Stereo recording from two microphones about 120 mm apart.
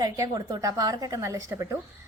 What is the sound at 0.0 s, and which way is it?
A woman's voice, 30° right (ahead or behind).